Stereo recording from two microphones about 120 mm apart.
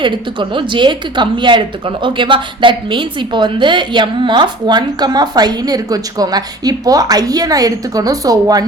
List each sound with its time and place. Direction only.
0.0 s speech: 40° right (ahead or behind)